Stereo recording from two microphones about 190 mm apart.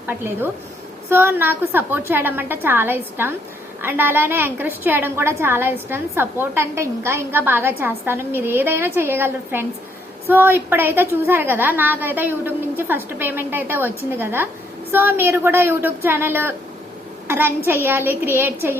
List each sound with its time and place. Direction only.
1.1 s a woman's voice: 10° right (ahead or behind)